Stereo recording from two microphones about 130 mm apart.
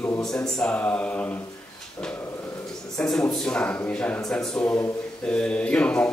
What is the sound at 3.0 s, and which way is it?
Speech, 5° left (ahead or behind).